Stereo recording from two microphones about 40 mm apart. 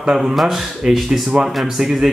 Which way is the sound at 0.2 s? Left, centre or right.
Centre.